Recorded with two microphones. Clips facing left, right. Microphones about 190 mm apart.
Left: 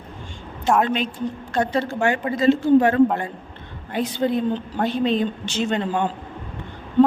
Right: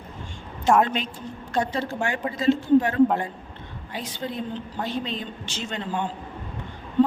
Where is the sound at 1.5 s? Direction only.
65° left (ahead or behind).